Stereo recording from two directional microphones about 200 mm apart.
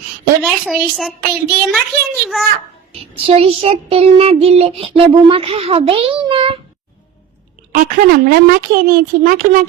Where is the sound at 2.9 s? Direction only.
30° right (ahead or behind).